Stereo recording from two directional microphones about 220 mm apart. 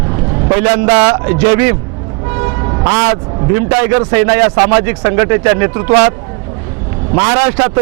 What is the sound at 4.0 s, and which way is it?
A man's voice, 15° right (ahead or behind).